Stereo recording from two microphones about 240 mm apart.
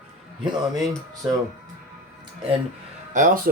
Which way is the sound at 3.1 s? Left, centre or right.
Right.